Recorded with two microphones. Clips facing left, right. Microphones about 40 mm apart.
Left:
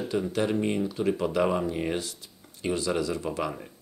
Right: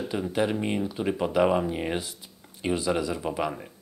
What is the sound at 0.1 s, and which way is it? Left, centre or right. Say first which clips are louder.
Speech: even; centre.